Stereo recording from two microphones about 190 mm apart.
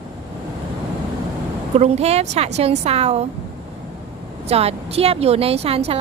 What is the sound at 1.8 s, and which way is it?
Speech, 35° right (ahead or behind).